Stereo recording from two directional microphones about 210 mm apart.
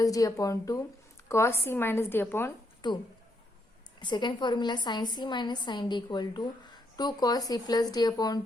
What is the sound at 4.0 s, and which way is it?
A woman's voice, 20° left (ahead or behind).